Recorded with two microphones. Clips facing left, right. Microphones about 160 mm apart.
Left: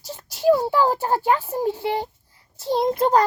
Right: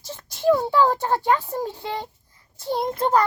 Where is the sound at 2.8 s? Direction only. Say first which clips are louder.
Left 3 dB; 10° left (ahead or behind).